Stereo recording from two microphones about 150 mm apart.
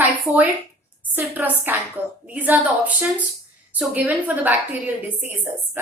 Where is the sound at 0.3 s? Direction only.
15° right (ahead or behind).